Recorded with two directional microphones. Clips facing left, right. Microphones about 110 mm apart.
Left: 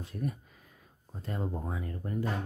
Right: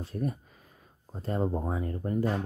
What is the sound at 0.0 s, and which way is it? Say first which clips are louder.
Speech: right 4 dB; 35° right (ahead or behind).